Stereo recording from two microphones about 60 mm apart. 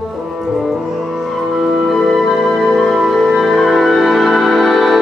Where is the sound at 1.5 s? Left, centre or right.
Centre.